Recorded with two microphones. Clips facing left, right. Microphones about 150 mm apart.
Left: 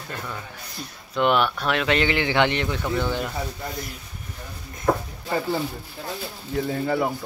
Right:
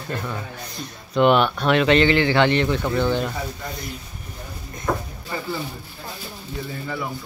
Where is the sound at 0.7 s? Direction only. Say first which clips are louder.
Right 5 dB; centre (ahead or behind).